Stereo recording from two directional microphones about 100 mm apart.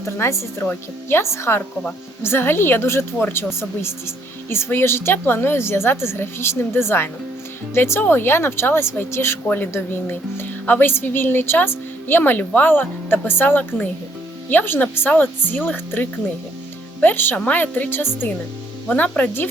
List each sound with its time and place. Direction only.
0.2 s a woman's voice: 25° left (ahead or behind)